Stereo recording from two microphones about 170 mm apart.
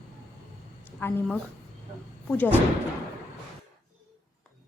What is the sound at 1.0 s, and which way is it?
Speech, 10° left (ahead or behind).